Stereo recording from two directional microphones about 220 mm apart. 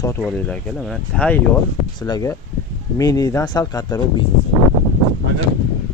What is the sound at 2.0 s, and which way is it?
Speech, 20° left (ahead or behind).